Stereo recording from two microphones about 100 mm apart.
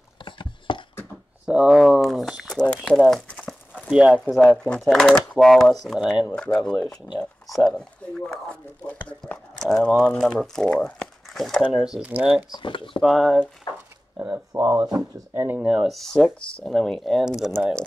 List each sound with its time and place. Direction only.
0.2 s chopping: 55° left (ahead or behind)
1.4 s speech: 10° right (ahead or behind); by 3.0 s 10° left (ahead or behind)
3.1 s crumpling: 10° left (ahead or behind)
3.9 s speech: 10° right (ahead or behind)
4.6 s speech: 5° left (ahead or behind)
9.6 s speech: 5° left (ahead or behind); by 12.4 s 15° right (ahead or behind)
12.4 s speech: 50° left (ahead or behind)
13.0 s speech: centre (ahead or behind)
14.5 s speech: 35° right (ahead or behind)
15.6 s speech: 5° right (ahead or behind)